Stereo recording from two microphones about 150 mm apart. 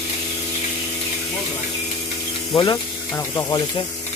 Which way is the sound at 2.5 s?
25° left (ahead or behind).